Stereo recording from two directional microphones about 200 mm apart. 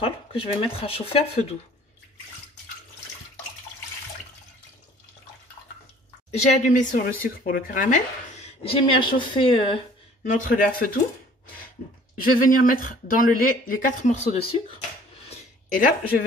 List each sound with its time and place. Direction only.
0.0 s speech: 30° left (ahead or behind)
6.3 s speech: 35° left (ahead or behind)
10.2 s speech: 40° left (ahead or behind)
11.4 s a sound: 45° left (ahead or behind)
12.4 s speech: 45° left (ahead or behind)
15.2 s a sound: 35° left (ahead or behind)